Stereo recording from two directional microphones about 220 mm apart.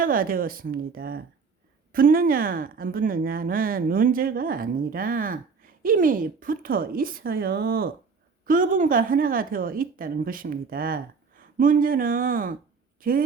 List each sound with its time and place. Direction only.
0.0 s a woman's voice: 40° right (ahead or behind)